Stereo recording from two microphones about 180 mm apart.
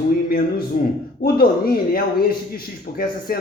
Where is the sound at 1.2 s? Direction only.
55° left (ahead or behind).